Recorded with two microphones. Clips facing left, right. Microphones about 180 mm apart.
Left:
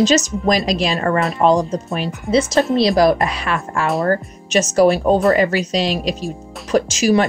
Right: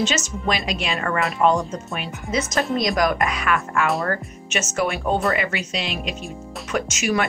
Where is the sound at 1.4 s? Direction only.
35° left (ahead or behind).